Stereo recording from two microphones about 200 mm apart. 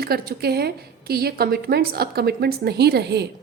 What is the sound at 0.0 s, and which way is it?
A woman's voice, 50° right (ahead or behind).